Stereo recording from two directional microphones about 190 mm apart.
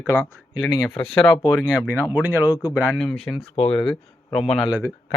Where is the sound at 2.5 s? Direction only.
20° left (ahead or behind).